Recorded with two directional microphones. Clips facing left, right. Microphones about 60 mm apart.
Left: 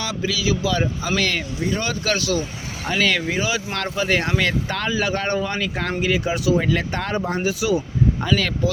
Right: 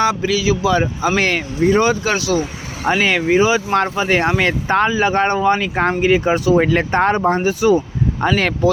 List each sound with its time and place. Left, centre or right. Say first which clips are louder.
0.0 s speech: right 8 dB; right
1.8 s speech: right 7 dB; right